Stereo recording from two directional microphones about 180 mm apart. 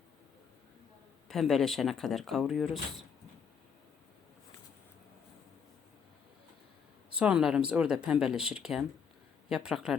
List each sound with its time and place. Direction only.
1.3 s speech: centre (ahead or behind)
7.2 s speech: 5° right (ahead or behind)